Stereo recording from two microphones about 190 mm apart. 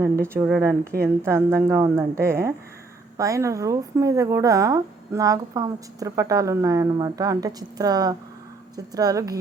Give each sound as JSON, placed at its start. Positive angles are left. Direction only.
{"t": 0.0, "sound": "speech", "side_deg": -15}